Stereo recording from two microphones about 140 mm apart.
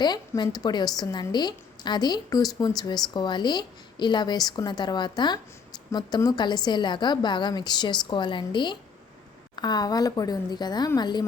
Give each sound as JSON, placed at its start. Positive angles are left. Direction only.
{"t": 0.0, "sound": "a woman's voice", "side_deg": 30}